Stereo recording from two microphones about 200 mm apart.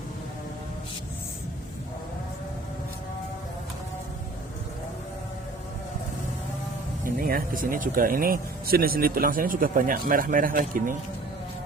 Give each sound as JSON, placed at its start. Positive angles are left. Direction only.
{"t": 7.0, "sound": "speech", "side_deg": -45}